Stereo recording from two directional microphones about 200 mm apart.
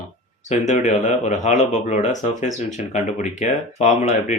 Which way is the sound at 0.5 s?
35° left (ahead or behind).